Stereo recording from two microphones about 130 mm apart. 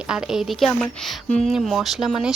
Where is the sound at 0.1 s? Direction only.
5° right (ahead or behind).